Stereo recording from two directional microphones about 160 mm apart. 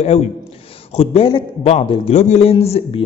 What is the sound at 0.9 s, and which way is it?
A man's voice, 35° left (ahead or behind).